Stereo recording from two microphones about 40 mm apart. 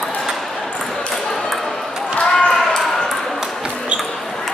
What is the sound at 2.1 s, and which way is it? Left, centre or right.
Basketball bounce, left.